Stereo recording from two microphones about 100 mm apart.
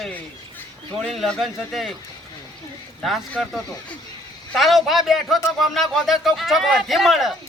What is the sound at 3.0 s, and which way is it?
Speech, centre (ahead or behind).